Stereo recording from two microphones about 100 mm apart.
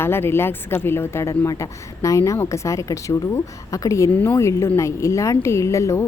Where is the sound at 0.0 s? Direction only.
25° left (ahead or behind).